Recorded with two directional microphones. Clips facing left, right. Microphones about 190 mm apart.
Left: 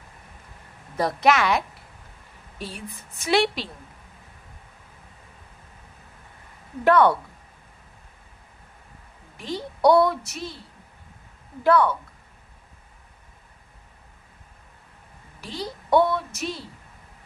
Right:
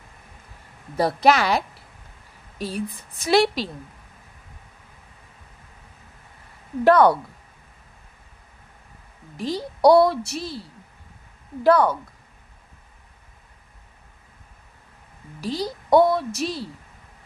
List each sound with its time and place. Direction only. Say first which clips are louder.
0.9 s a woman's voice: right 2 dB; 35° right (ahead or behind)
6.8 s a woman's voice: right 2 dB; 40° right (ahead or behind)
9.4 s a woman's voice: right 3 dB; 35° right (ahead or behind)
11.6 s a woman's voice: right 2 dB; 40° right (ahead or behind)
15.4 s a woman's voice: right 6 dB; 35° right (ahead or behind)